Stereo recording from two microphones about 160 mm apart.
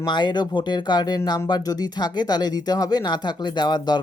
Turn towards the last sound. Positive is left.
turn(degrees=25)  # may be behind; listen again after turning